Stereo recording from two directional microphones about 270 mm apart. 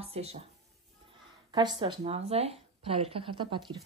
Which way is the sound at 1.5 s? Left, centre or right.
Centre.